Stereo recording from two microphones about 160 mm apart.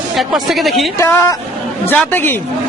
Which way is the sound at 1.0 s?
15° left (ahead or behind).